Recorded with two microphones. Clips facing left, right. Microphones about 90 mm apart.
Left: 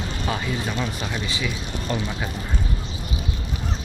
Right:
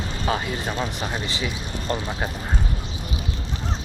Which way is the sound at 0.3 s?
35° right (ahead or behind).